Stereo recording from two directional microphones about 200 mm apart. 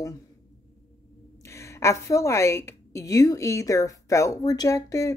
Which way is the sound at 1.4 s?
15° left (ahead or behind).